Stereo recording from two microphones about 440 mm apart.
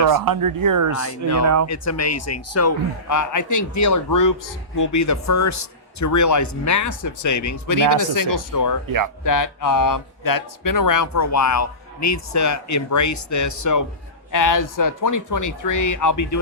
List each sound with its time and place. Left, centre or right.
0.0 s speech: right
1.6 s a man's voice: left